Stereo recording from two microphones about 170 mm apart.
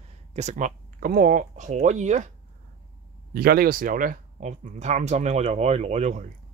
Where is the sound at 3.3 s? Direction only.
60° right (ahead or behind).